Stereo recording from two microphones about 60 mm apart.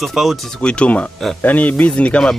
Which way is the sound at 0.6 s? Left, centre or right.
Centre.